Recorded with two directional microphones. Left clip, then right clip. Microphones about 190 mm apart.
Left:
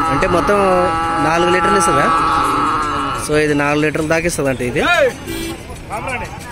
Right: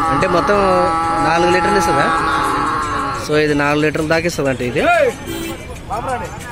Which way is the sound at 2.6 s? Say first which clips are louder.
Left 1 dB; 10° right (ahead or behind).